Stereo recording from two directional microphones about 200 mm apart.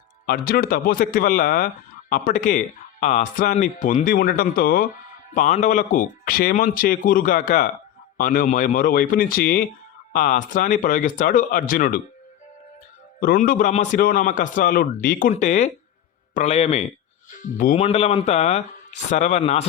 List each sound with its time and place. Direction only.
0.3 s a man's voice: 50° left (ahead or behind)
13.1 s a man's voice: 45° left (ahead or behind)
17.4 s speech: 45° left (ahead or behind)
17.7 s a man's voice: 30° left (ahead or behind)